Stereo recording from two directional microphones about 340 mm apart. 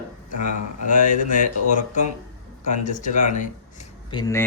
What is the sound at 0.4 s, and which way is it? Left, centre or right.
Speech, left.